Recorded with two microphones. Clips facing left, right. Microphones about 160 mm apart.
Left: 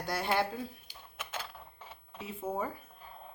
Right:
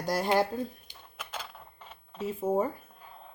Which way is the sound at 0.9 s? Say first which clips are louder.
Right 1 dB; 5° left (ahead or behind).